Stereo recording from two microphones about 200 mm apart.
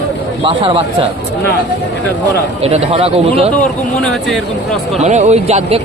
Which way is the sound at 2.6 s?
30° right (ahead or behind).